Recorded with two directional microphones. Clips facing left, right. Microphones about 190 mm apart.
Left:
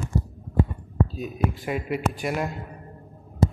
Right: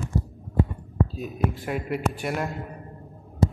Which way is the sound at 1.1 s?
Centre (ahead or behind).